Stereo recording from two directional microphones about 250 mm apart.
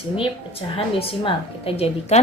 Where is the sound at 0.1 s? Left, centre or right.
Left.